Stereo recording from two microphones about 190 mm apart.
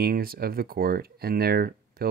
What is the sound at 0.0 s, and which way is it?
Speech, 50° right (ahead or behind).